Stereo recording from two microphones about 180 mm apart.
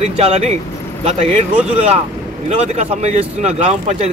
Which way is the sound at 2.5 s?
35° right (ahead or behind).